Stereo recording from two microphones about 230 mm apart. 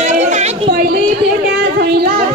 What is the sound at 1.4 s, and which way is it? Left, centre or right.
Child singing, right.